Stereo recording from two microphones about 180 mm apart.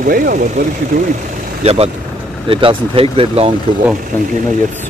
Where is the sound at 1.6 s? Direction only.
35° right (ahead or behind).